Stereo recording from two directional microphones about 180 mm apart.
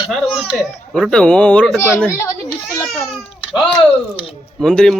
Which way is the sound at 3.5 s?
Centre (ahead or behind).